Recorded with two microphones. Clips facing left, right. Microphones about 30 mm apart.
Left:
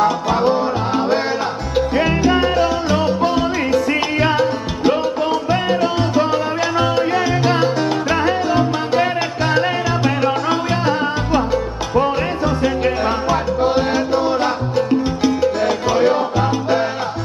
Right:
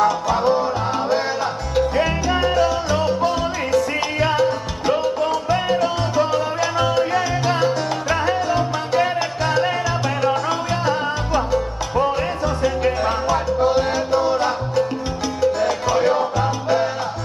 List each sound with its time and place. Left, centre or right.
0.0 s music: centre
1.8 s salsa music: centre